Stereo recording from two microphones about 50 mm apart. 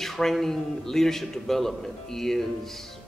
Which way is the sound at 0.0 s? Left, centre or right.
Centre.